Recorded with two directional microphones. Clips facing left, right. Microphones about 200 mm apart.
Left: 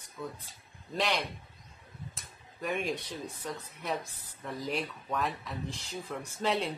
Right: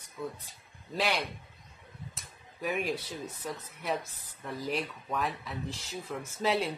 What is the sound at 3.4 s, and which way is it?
A man's voice, centre (ahead or behind).